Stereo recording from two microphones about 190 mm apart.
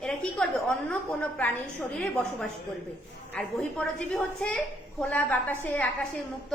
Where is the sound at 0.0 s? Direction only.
5° left (ahead or behind).